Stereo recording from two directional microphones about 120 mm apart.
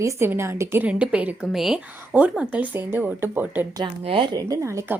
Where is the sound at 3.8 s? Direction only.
45° right (ahead or behind); by 4.9 s 25° right (ahead or behind).